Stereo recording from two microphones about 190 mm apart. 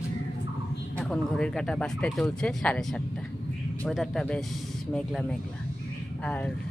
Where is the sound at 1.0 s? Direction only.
5° left (ahead or behind).